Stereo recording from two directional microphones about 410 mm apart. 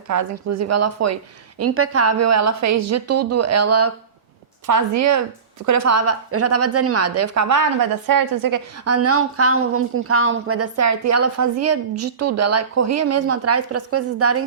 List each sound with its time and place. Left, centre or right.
0.1 s a woman's voice: right
4.6 s a woman's voice: right